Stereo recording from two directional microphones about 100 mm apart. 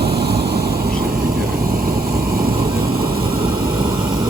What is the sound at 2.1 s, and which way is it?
Vehicle, 30° right (ahead or behind).